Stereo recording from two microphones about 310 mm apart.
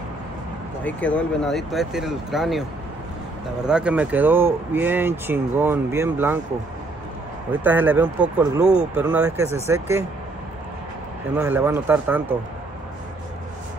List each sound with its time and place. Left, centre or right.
0.8 s speech: centre
3.6 s speech: centre
7.6 s speech: centre
11.3 s speech: centre